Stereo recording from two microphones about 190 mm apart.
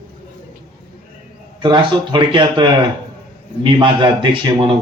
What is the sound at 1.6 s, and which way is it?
Speech, 25° right (ahead or behind).